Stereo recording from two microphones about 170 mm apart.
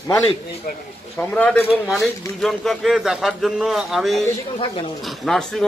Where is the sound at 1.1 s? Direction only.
5° left (ahead or behind).